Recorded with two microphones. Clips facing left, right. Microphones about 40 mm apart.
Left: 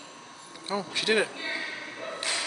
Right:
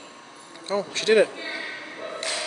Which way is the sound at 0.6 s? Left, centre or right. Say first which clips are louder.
Right 4 dB; centre.